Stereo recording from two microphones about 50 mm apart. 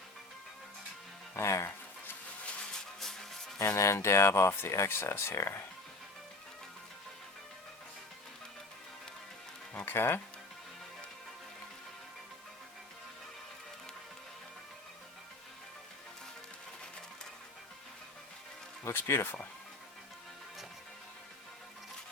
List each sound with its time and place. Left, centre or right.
1.4 s speech: left
3.0 s music: centre
3.6 s speech: left
9.7 s speech: left
18.9 s speech: left